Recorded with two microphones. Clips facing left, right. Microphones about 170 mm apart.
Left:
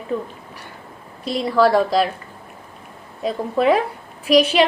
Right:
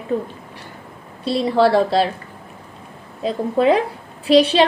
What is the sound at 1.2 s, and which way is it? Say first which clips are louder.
Speech: right 1 dB; 30° right (ahead or behind).